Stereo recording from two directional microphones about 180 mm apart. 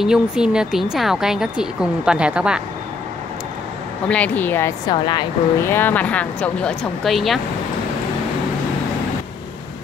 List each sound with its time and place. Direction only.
0.0 s speech: 5° right (ahead or behind)
4.1 s speech: 5° left (ahead or behind)
4.9 s speech: 25° left (ahead or behind)
5.6 s speech: 10° left (ahead or behind)